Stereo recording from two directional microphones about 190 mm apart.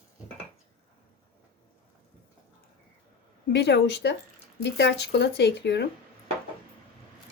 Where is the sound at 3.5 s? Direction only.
65° left (ahead or behind).